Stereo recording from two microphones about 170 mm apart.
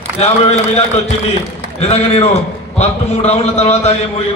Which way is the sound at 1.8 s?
40° left (ahead or behind).